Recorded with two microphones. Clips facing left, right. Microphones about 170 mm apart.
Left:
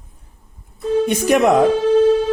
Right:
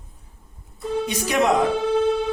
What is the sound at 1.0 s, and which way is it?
Speech, 55° left (ahead or behind).